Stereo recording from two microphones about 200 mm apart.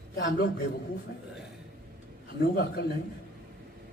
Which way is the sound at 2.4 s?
55° left (ahead or behind).